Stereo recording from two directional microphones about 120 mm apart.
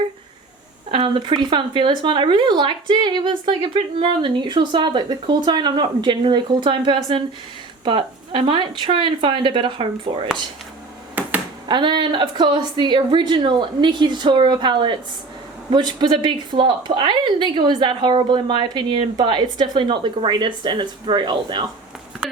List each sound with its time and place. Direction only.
0.9 s speech: 45° right (ahead or behind)
11.2 s a sound: 15° right (ahead or behind)
11.7 s speech: 40° right (ahead or behind)